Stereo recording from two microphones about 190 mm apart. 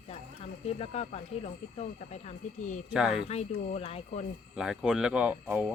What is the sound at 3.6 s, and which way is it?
Speech, 35° left (ahead or behind).